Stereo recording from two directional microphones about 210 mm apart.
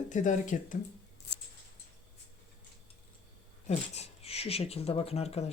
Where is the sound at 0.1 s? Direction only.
35° left (ahead or behind).